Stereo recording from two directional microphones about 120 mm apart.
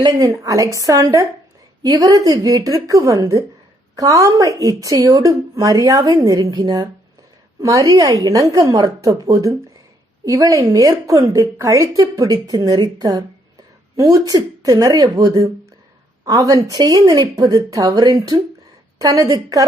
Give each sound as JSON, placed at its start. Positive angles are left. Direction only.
{"t": 0.4, "sound": "a woman's voice", "side_deg": -30}